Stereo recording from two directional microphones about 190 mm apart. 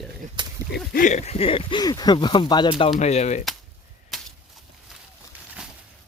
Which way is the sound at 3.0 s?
35° left (ahead or behind).